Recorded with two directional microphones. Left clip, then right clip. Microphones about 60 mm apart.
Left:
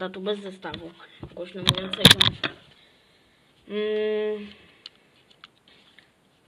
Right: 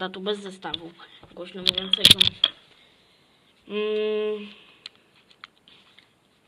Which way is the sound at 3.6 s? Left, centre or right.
Right.